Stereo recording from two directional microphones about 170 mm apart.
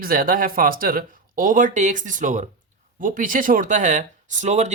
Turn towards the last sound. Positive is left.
turn(degrees=-45)  # may be behind; listen again after turning